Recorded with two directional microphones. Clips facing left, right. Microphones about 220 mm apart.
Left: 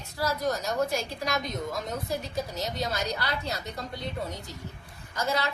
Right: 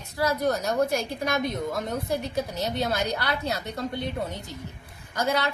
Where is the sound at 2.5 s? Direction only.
60° right (ahead or behind).